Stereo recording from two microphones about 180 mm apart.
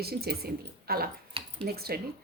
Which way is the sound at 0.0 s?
60° right (ahead or behind).